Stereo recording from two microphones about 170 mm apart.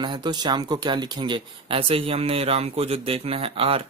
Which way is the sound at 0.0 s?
25° right (ahead or behind).